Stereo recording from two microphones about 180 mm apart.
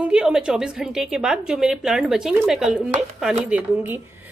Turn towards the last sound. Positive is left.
turn(degrees=-10)  # may be behind; listen again after turning